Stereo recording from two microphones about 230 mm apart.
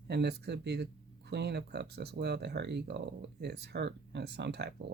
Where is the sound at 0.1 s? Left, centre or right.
Right.